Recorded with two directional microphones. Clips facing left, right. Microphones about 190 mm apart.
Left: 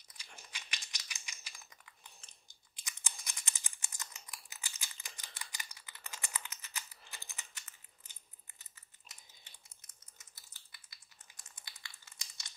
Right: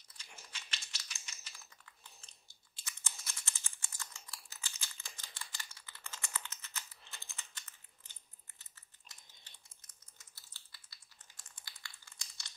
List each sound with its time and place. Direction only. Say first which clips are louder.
0.5 s typing: left 1 dB; 15° left (ahead or behind)
2.7 s computer keyboard: left 1 dB; 15° left (ahead or behind)
7.2 s a sound: left 1 dB; 15° left (ahead or behind)
10.1 s typing: even; 20° left (ahead or behind)
11.3 s crumpling: left 1 dB; 20° left (ahead or behind)